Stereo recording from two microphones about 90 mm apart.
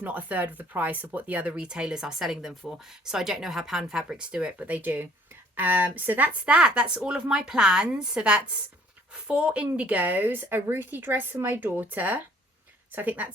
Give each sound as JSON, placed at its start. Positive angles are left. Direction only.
{"t": 0.0, "sound": "speech", "side_deg": -15}